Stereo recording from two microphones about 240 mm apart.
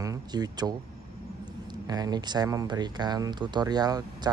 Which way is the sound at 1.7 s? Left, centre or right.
Centre.